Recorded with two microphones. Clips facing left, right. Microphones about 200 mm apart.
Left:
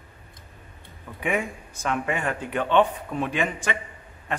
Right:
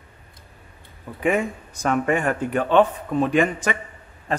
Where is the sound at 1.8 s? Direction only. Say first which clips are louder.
Right 6 dB; 40° right (ahead or behind).